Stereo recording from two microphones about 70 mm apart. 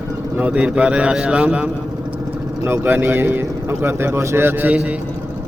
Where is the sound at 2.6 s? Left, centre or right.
Right.